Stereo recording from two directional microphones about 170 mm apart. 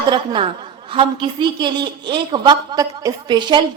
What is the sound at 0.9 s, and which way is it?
A woman's voice, 30° right (ahead or behind).